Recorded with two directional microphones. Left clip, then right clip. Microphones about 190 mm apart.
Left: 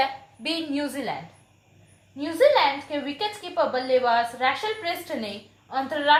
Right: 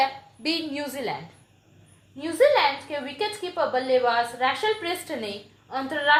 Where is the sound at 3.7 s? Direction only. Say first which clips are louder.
Right 1 dB; 35° right (ahead or behind).